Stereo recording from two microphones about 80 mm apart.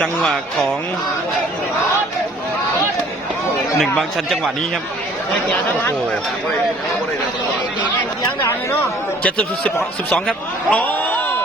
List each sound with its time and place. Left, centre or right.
0.0 s speech: centre
3.8 s speech: centre
9.2 s speech: centre